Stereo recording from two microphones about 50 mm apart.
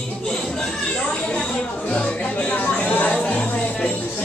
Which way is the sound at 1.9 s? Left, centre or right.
Left.